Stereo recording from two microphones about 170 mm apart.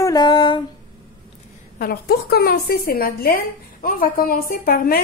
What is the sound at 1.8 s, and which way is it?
A woman's voice, 65° left (ahead or behind).